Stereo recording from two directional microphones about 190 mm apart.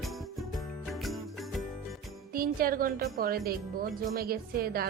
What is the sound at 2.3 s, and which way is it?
Speech, 50° right (ahead or behind).